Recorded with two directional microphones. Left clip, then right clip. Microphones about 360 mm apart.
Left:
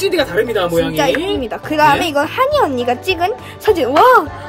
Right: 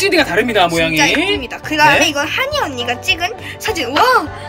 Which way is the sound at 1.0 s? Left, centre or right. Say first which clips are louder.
Right 2 dB; left.